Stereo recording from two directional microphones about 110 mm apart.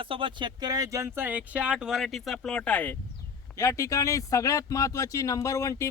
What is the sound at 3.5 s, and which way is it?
A man's voice, 30° left (ahead or behind).